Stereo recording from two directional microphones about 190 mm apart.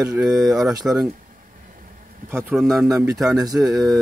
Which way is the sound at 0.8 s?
Centre (ahead or behind).